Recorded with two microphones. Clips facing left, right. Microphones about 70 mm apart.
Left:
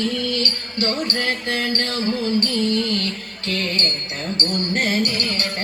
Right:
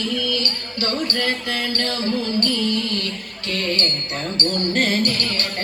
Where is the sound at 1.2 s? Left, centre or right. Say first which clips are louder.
Even; left.